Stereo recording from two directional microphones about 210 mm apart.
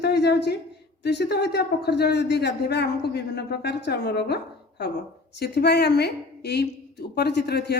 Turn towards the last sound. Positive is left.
turn(degrees=50)  # may be behind; listen again after turning